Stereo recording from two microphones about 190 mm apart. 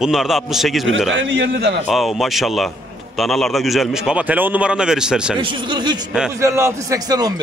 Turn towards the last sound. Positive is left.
turn(degrees=-20)  # may be behind; listen again after turning